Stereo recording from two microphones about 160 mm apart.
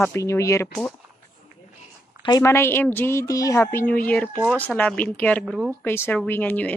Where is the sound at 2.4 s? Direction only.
15° left (ahead or behind).